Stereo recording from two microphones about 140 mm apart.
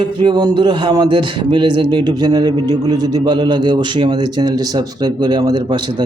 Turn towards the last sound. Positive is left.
turn(degrees=-30)  # may be behind; listen again after turning